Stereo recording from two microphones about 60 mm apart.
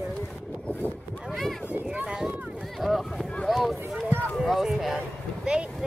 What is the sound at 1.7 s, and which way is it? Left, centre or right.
Run, right.